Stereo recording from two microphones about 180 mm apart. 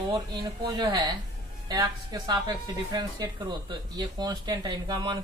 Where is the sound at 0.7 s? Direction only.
25° right (ahead or behind).